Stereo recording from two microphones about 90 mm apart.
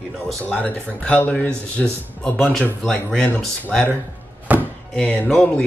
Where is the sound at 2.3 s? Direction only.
5° left (ahead or behind).